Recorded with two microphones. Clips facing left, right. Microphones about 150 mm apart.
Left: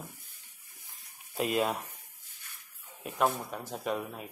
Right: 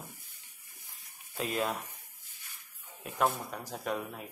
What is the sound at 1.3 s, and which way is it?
Speech, 10° left (ahead or behind).